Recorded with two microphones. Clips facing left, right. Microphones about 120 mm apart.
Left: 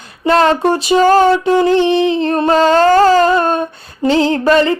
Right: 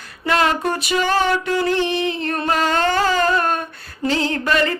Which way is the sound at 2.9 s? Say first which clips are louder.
Left 10 dB; 40° left (ahead or behind).